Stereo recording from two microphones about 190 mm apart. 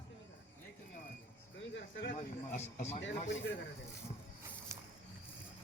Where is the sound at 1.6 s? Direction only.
70° left (ahead or behind).